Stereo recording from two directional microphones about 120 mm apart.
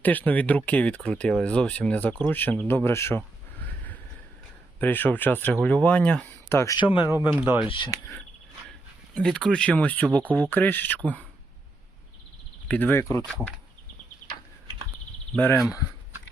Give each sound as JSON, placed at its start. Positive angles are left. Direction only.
{"t": 0.0, "sound": "speech", "side_deg": 15}
{"t": 4.8, "sound": "speech", "side_deg": 15}
{"t": 6.7, "sound": "speech", "side_deg": 45}
{"t": 7.0, "sound": "speech", "side_deg": -20}
{"t": 9.1, "sound": "speech", "side_deg": 5}
{"t": 12.6, "sound": "speech", "side_deg": 15}
{"t": 15.5, "sound": "speech", "side_deg": -5}